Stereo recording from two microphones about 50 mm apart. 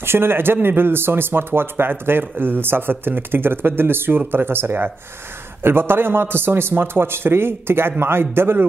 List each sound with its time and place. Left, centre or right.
0.0 s speech: right